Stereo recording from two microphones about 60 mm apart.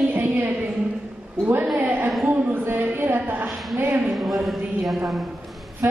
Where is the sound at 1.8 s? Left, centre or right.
Right.